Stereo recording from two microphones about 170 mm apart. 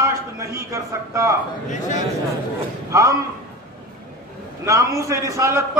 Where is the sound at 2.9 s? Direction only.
20° right (ahead or behind).